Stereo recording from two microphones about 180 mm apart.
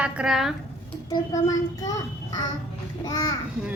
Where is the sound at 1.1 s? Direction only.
20° left (ahead or behind).